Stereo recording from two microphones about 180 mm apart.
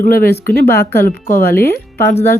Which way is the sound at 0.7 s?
15° left (ahead or behind).